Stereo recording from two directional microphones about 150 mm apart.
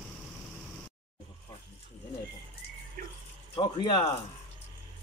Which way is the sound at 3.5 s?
35° left (ahead or behind).